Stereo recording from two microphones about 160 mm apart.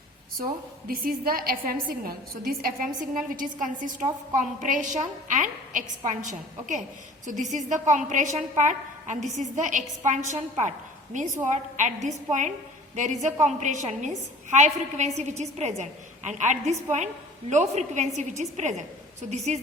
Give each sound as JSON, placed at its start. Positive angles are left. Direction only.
{"t": 0.9, "sound": "a woman's voice", "side_deg": -65}